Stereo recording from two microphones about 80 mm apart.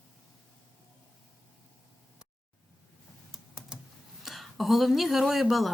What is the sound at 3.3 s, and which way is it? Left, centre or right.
Typing, centre.